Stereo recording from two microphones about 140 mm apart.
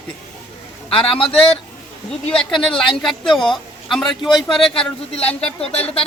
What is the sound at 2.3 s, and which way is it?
Speech, centre (ahead or behind).